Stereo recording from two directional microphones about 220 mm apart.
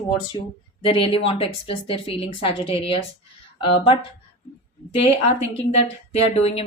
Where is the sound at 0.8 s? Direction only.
25° left (ahead or behind).